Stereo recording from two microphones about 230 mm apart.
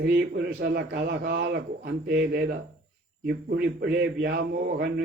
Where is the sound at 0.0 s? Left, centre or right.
Right.